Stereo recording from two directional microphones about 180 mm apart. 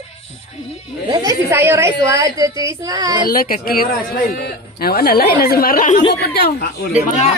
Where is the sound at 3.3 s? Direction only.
50° left (ahead or behind).